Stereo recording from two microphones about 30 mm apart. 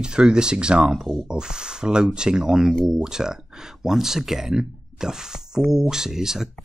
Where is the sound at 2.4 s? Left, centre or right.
Centre.